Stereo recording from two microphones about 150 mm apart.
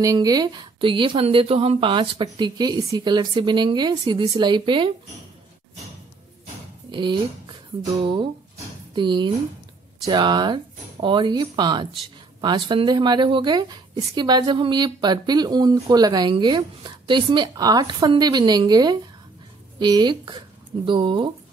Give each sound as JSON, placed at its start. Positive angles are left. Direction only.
{"t": 0.0, "sound": "speech", "side_deg": -25}
{"t": 4.1, "sound": "speech", "side_deg": -40}
{"t": 4.4, "sound": "speech", "side_deg": -30}
{"t": 6.9, "sound": "speech", "side_deg": -30}